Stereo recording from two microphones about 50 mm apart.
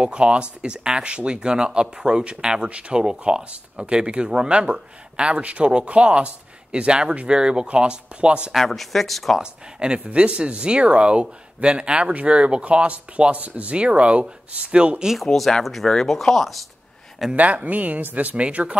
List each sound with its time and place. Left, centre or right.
0.0 s speech: right
8.5 s speech: centre
9.4 s speech: centre
15.2 s speech: centre
17.4 s speech: right